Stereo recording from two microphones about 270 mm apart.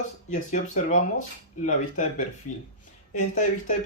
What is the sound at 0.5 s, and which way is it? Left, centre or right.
Speech, left.